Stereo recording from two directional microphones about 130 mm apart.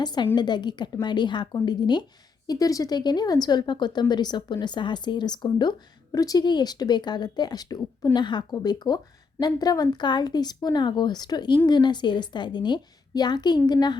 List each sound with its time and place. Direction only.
0.0 s speech: 35° left (ahead or behind)